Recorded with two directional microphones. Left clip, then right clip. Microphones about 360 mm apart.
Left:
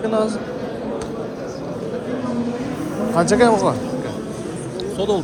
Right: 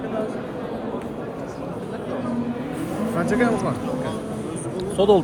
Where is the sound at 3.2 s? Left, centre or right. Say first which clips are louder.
Left 7 dB; centre.